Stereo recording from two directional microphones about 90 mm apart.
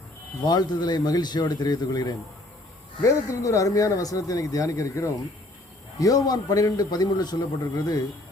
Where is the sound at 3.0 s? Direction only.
35° left (ahead or behind).